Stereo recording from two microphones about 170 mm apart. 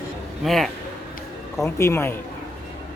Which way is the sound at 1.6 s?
15° left (ahead or behind).